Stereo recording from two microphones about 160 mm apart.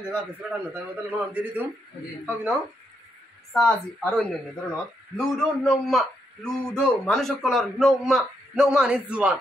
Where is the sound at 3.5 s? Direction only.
5° left (ahead or behind).